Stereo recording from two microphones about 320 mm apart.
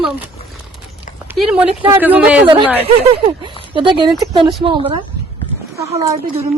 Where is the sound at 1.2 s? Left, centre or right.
Centre.